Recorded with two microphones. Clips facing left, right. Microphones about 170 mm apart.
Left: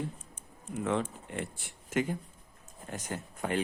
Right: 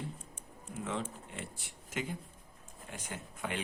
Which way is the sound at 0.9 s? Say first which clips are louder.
Left 7 dB; 60° left (ahead or behind).